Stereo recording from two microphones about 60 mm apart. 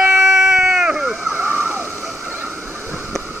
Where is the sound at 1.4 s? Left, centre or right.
Right.